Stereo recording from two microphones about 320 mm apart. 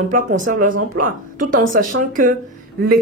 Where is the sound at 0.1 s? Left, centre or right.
Right.